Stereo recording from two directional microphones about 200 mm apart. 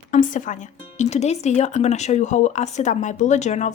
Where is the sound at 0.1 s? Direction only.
40° left (ahead or behind).